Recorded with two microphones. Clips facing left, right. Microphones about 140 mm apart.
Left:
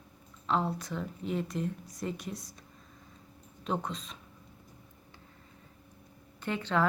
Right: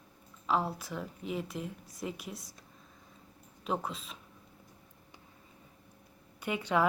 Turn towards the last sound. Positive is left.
turn(degrees=-10)  # may be behind; listen again after turning